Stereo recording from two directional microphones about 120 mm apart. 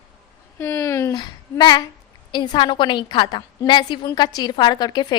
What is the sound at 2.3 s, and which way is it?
A woman's voice, 40° left (ahead or behind).